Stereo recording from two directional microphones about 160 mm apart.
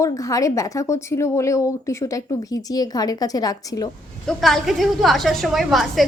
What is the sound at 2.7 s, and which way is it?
A woman's voice, 25° left (ahead or behind).